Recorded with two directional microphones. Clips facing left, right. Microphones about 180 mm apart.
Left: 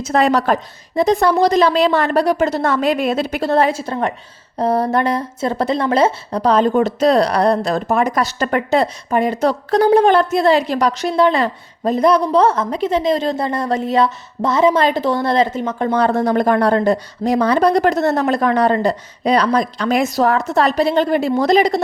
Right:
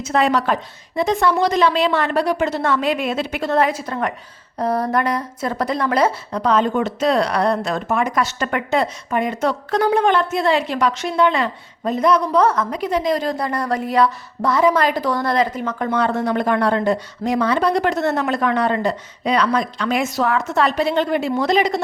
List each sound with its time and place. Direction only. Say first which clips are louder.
0.0 s a woman's voice: left 3 dB; 40° left (ahead or behind)